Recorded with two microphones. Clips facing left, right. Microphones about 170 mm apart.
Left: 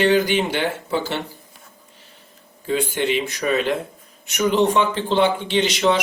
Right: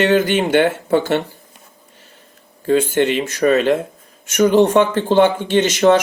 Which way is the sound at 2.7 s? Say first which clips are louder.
Right 6 dB; 50° right (ahead or behind).